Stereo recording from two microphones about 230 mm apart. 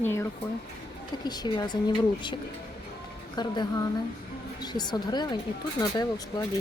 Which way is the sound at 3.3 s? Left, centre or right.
Centre.